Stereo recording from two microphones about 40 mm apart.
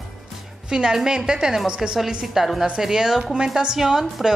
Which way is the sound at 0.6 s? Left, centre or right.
Centre.